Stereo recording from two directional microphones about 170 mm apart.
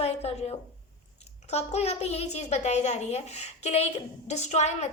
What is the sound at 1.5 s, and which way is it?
A woman's voice, 40° left (ahead or behind).